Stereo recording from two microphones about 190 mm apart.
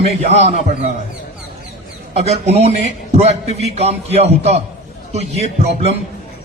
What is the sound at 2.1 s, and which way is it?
A man's voice, 35° right (ahead or behind).